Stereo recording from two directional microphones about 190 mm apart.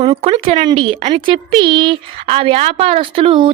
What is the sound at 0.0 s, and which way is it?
Speech, 30° right (ahead or behind).